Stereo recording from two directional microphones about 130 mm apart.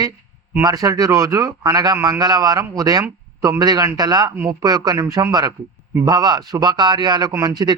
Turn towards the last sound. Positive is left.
turn(degrees=-30)  # may be behind; listen again after turning